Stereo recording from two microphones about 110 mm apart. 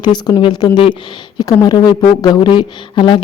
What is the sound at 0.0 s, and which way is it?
Speech, 40° left (ahead or behind).